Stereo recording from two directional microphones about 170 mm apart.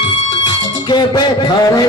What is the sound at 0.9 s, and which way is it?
A man's voice, 25° left (ahead or behind).